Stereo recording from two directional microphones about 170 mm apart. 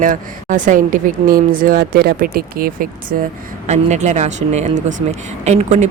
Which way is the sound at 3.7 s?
40° right (ahead or behind).